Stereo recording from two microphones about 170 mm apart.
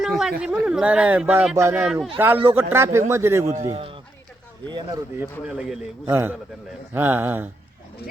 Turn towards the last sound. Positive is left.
turn(degrees=-10)  # may be behind; listen again after turning